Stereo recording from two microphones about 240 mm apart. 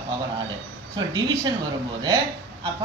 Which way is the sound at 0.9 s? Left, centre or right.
Centre.